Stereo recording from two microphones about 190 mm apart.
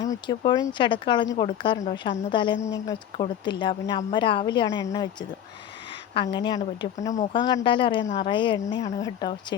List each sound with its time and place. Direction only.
0.0 s speech: 20° left (ahead or behind)
6.1 s speech: 25° left (ahead or behind)
7.0 s speech: 40° left (ahead or behind)
7.3 s speech: 25° left (ahead or behind)